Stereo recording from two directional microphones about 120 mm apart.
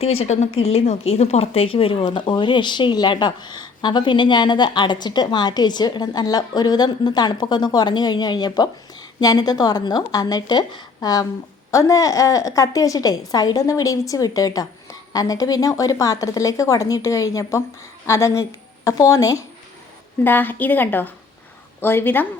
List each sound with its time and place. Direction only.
0.0 s a woman's voice: 60° left (ahead or behind); by 19.5 s 25° left (ahead or behind)
20.2 s a woman's voice: 15° left (ahead or behind)